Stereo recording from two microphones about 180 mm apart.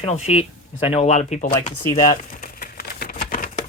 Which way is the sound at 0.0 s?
35° left (ahead or behind).